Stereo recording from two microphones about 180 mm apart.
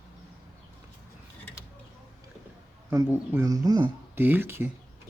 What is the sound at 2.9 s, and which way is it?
Speech, 10° right (ahead or behind).